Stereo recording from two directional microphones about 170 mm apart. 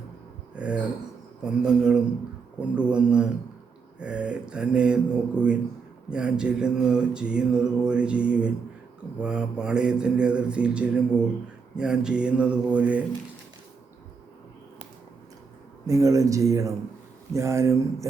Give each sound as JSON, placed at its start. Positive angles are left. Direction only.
{"t": 0.5, "sound": "speech", "side_deg": -5}
{"t": 1.5, "sound": "mantra", "side_deg": -5}
{"t": 15.9, "sound": "speech", "side_deg": -20}
{"t": 17.3, "sound": "mantra", "side_deg": -15}